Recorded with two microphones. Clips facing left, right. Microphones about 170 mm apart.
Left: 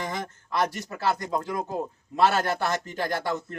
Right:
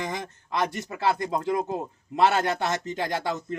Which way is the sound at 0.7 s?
20° right (ahead or behind).